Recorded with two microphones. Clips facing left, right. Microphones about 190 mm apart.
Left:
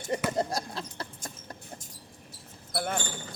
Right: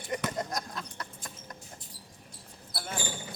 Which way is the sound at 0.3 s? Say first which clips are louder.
Left 5 dB; 30° left (ahead or behind).